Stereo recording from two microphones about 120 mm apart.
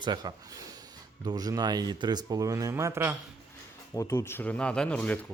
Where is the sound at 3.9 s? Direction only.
25° left (ahead or behind).